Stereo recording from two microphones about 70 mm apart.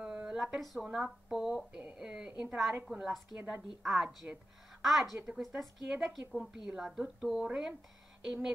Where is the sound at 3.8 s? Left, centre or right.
Centre.